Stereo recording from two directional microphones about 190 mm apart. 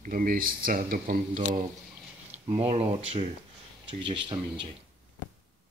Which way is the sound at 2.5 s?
30° right (ahead or behind).